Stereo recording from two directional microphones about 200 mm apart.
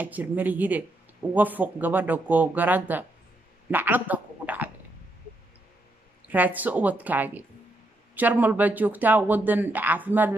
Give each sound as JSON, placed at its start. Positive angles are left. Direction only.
{"t": 0.0, "sound": "speech", "side_deg": -10}
{"t": 6.2, "sound": "speech", "side_deg": -10}